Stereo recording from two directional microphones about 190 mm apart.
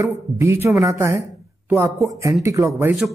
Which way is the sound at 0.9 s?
15° right (ahead or behind).